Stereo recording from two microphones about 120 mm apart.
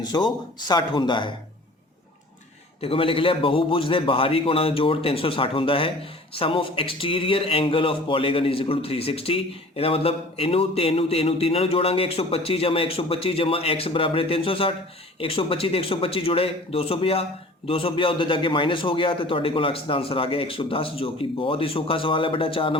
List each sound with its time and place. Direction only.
0.0 s speech: 35° left (ahead or behind)
2.8 s speech: 50° left (ahead or behind)